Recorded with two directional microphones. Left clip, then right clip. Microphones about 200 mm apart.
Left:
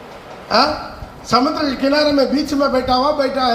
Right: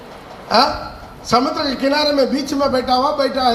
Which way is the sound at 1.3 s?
35° right (ahead or behind).